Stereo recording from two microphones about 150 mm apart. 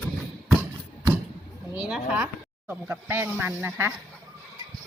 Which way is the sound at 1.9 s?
10° right (ahead or behind).